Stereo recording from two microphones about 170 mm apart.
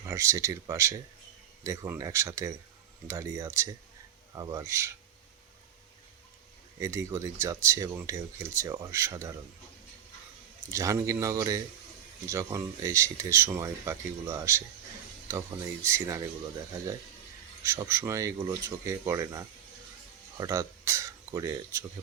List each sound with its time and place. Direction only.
0.0 s speech: 15° right (ahead or behind)
6.7 s speech: 15° right (ahead or behind)
10.7 s a man's voice: 20° right (ahead or behind)
17.6 s speech: 15° right (ahead or behind)